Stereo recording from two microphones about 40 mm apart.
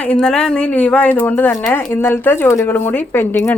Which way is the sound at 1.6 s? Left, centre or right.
Left.